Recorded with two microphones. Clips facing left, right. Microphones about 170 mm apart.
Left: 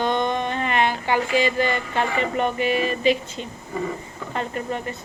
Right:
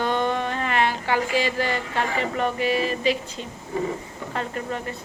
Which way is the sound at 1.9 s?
20° left (ahead or behind).